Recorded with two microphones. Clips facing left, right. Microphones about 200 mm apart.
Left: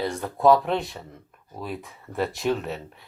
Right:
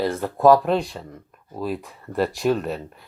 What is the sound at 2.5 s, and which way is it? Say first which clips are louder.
Speech: right 3 dB; 60° right (ahead or behind).